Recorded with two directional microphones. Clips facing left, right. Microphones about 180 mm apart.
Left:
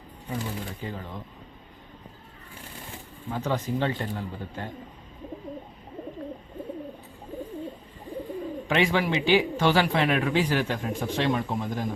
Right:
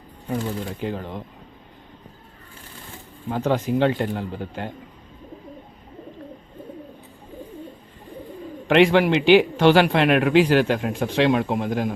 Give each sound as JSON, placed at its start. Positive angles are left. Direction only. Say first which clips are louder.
{"t": 0.8, "sound": "speech", "louder": "right 7 dB", "side_deg": -65}
{"t": 3.2, "sound": "speech", "louder": "right 6 dB", "side_deg": -60}
{"t": 8.6, "sound": "speech", "louder": "right 9 dB", "side_deg": -70}